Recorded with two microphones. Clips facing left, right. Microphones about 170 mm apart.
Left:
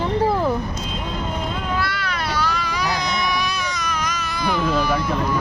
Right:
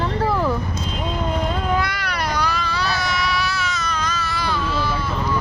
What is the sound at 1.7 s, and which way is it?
Cat, 15° right (ahead or behind).